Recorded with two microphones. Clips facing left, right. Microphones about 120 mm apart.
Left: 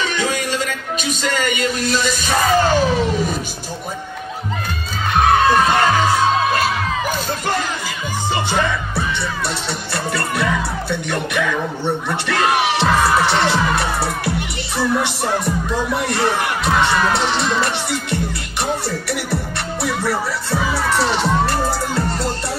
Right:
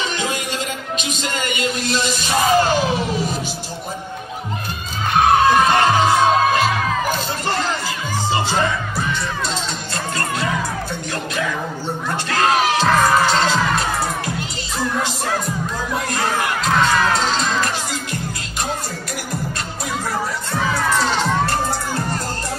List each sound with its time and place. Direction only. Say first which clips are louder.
1.0 s speech: left 6 dB; 45° left (ahead or behind)
5.1 s music: even; centre (ahead or behind)
7.1 s speech: left 1 dB; 15° left (ahead or behind)
12.1 s speech: right 2 dB; 5° left (ahead or behind)
16.6 s children shouting: even; 5° left (ahead or behind)
20.5 s children shouting: left 1 dB; 10° left (ahead or behind)